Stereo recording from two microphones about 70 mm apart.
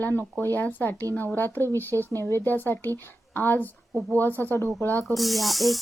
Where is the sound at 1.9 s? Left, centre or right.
Left.